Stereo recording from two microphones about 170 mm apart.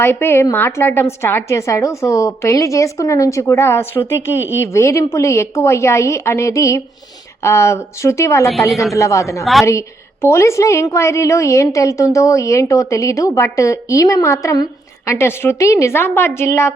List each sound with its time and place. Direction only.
0.0 s a woman's voice: 10° left (ahead or behind)
9.4 s a woman's voice: centre (ahead or behind)
9.6 s a woman's voice: 15° left (ahead or behind)